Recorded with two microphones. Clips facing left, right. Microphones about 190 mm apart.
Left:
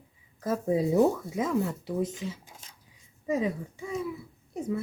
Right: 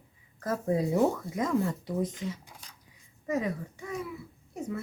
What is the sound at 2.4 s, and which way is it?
Speech, 25° left (ahead or behind).